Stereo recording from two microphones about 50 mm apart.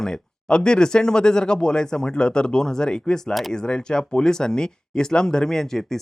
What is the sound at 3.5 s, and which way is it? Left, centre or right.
Speech, centre.